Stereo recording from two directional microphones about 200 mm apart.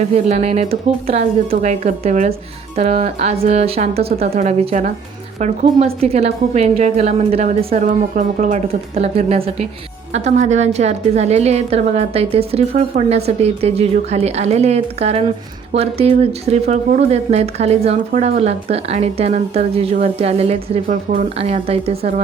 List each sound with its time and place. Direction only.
0.0 s speech: 35° right (ahead or behind)